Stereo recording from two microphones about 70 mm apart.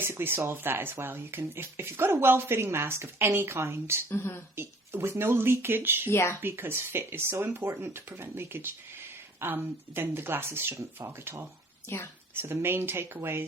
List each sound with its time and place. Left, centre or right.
0.0 s speech: right
4.1 s speech: left
4.5 s speech: right
6.1 s speech: left
6.4 s speech: right
11.9 s speech: left
12.3 s speech: right